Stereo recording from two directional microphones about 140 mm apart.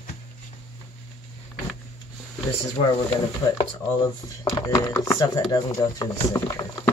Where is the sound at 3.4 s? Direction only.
25° left (ahead or behind).